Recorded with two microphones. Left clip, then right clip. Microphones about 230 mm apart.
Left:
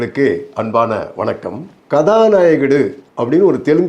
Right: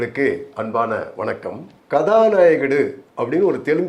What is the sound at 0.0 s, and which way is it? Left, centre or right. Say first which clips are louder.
Speech: left 5 dB; left.